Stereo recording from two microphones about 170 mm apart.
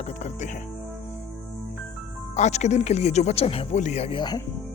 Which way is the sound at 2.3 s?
45° left (ahead or behind).